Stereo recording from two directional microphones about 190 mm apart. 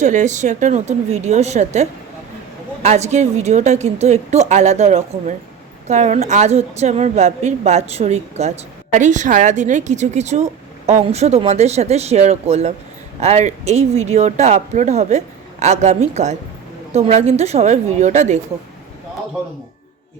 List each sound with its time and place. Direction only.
0.0 s a woman's voice: 40° right (ahead or behind)